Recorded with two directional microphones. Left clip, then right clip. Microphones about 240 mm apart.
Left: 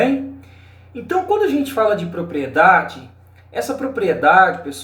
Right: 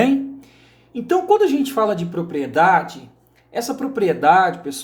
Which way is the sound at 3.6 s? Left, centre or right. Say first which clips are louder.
Left 1 dB; right.